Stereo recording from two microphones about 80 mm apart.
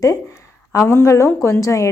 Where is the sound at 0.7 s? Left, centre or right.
Left.